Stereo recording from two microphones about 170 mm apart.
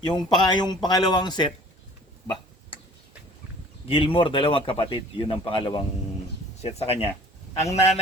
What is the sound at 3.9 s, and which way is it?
Speech, 30° left (ahead or behind).